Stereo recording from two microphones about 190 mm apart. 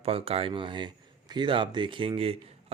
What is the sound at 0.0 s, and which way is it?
A man's voice, 30° right (ahead or behind).